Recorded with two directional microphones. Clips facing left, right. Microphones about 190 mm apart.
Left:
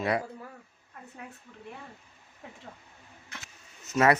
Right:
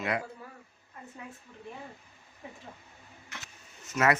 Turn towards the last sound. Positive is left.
turn(degrees=30)  # may be behind; listen again after turning